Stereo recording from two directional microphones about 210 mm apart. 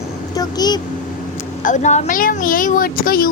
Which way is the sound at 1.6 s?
35° left (ahead or behind).